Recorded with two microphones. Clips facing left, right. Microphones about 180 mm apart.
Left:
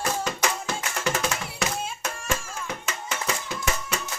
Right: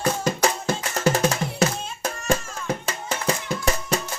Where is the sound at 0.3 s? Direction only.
40° right (ahead or behind).